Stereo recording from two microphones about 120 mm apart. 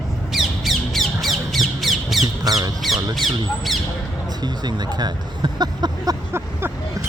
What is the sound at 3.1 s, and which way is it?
Speech, centre (ahead or behind).